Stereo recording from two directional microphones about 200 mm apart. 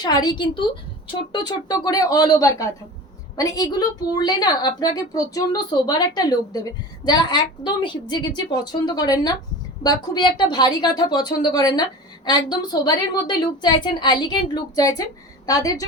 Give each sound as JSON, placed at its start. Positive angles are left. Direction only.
{"t": 0.0, "sound": "a woman's voice", "side_deg": 20}